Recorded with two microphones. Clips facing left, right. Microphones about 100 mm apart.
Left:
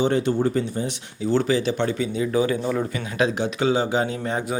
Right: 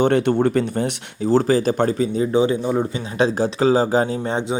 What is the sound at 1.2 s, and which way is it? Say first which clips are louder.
Speech: right 4 dB; 40° right (ahead or behind).